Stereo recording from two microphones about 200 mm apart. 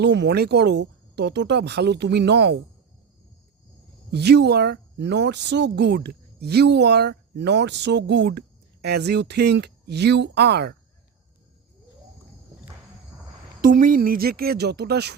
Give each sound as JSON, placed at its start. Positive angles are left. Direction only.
{"t": 0.0, "sound": "speech", "side_deg": -60}
{"t": 4.1, "sound": "speech", "side_deg": -55}
{"t": 13.6, "sound": "speech", "side_deg": -45}